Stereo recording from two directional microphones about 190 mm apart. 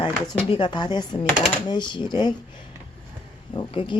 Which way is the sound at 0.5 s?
25° left (ahead or behind).